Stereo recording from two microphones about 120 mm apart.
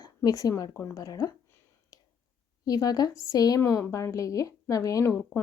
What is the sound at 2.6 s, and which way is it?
A woman's voice, 30° left (ahead or behind).